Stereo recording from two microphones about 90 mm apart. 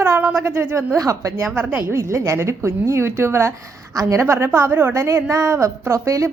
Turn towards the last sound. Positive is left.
turn(degrees=-35)  # may be behind; listen again after turning